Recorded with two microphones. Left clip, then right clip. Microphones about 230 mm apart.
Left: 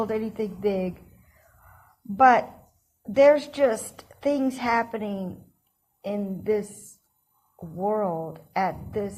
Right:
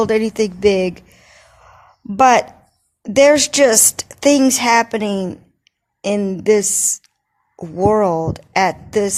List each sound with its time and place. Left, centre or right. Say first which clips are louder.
0.0 s a woman's voice: right 12 dB; right
2.1 s a woman's voice: right 6 dB; right
7.8 s a woman's voice: right 12 dB; right